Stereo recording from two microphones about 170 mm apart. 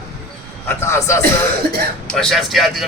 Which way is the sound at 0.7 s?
15° left (ahead or behind).